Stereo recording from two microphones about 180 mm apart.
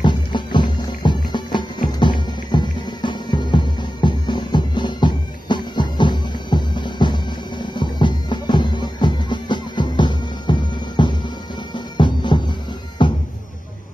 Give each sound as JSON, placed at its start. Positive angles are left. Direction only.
{"t": 0.0, "sound": "music", "side_deg": 25}